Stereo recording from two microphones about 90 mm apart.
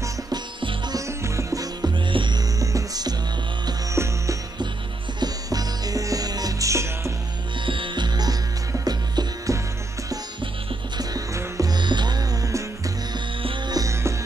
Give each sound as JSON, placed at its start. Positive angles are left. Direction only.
{"t": 0.3, "sound": "music", "side_deg": -60}
{"t": 0.9, "sound": "music", "side_deg": -35}
{"t": 2.0, "sound": "music", "side_deg": -65}
{"t": 2.6, "sound": "music", "side_deg": -40}
{"t": 3.9, "sound": "music", "side_deg": -30}
{"t": 5.2, "sound": "music", "side_deg": -45}
{"t": 7.6, "sound": "music", "side_deg": -70}
{"t": 11.0, "sound": "music", "side_deg": -40}
{"t": 11.7, "sound": "music", "side_deg": -55}